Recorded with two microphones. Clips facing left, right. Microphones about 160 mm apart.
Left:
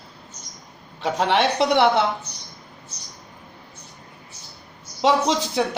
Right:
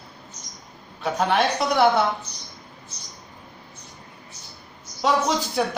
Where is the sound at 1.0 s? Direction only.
25° left (ahead or behind).